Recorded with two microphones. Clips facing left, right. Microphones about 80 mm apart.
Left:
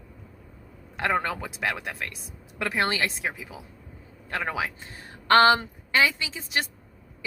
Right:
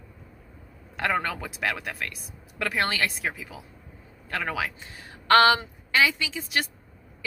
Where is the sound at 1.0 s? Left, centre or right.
Centre.